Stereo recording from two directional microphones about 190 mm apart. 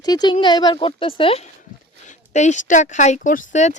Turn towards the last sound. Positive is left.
turn(degrees=40)  # may be behind; listen again after turning